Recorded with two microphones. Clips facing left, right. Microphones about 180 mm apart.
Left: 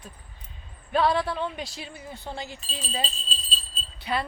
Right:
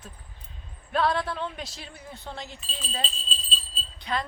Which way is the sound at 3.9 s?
10° left (ahead or behind).